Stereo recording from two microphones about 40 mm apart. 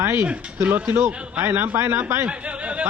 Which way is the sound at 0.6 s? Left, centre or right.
Right.